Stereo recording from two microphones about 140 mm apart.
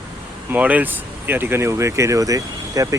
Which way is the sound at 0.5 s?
10° right (ahead or behind).